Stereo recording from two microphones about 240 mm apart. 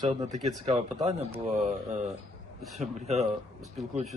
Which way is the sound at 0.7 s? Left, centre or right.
Right.